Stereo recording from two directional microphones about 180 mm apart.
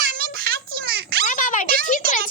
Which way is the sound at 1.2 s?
45° left (ahead or behind).